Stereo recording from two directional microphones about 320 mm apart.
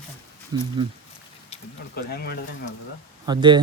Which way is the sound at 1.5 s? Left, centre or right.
Centre.